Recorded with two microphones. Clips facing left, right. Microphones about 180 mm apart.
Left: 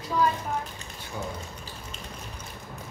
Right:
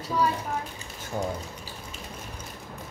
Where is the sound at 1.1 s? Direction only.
45° right (ahead or behind).